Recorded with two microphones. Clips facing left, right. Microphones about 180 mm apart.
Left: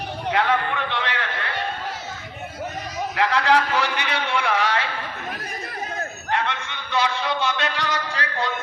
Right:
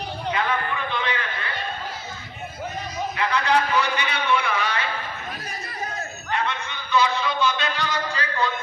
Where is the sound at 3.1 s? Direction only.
85° left.